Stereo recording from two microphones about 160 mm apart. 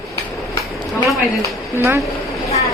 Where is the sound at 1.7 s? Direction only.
20° right (ahead or behind).